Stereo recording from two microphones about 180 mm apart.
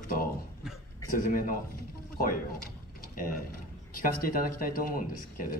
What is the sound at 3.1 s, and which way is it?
Speech, 55° left (ahead or behind).